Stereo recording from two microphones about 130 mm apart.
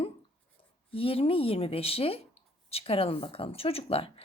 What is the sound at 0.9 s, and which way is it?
Speech, 45° left (ahead or behind).